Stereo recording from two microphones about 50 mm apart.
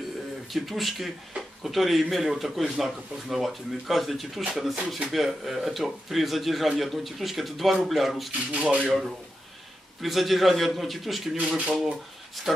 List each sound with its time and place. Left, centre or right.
0.5 s a man's voice: centre
8.5 s speech: right
8.8 s a man's voice: centre
11.3 s speech: right
12.5 s a man's voice: centre